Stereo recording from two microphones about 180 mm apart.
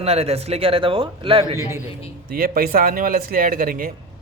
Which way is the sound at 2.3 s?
55° right (ahead or behind).